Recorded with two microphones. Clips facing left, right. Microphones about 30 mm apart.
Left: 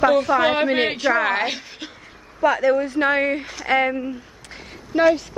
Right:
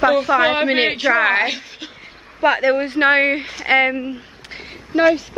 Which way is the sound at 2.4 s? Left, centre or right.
Right.